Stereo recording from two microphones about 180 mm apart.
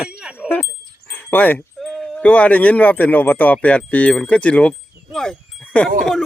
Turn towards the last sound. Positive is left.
turn(degrees=5)  # may be behind; listen again after turning